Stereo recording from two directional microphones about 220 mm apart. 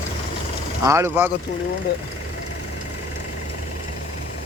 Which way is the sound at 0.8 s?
10° right (ahead or behind).